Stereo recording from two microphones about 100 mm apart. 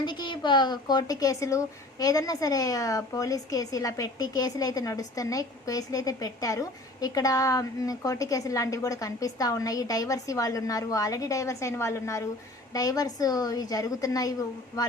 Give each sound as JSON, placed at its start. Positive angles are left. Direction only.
{"t": 0.0, "sound": "speech", "side_deg": 50}